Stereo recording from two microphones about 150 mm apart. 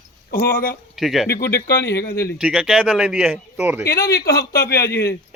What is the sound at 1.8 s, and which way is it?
Speech, 90° left.